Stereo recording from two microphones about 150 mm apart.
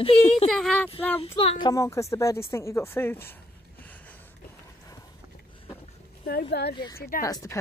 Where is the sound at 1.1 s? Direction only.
40° left (ahead or behind).